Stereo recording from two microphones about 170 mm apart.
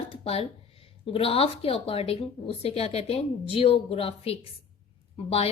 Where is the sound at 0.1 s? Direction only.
35° left (ahead or behind).